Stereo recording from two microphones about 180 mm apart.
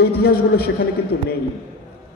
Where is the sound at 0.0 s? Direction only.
60° left (ahead or behind).